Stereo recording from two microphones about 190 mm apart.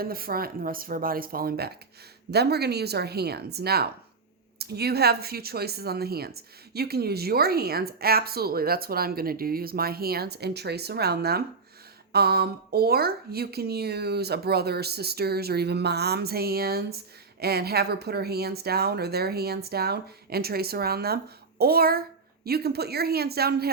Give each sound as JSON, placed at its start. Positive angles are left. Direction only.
{"t": 0.0, "sound": "speech", "side_deg": -50}